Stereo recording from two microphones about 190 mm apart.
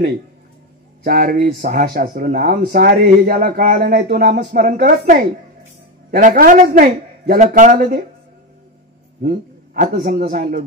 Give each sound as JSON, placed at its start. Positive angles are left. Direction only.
{"t": 1.0, "sound": "speech", "side_deg": -45}
{"t": 9.2, "sound": "a man's voice", "side_deg": -50}